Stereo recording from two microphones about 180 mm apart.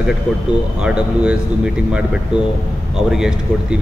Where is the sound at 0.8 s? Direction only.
5° right (ahead or behind).